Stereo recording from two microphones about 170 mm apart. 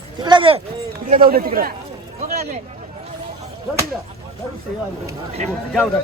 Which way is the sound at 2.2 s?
55° right (ahead or behind).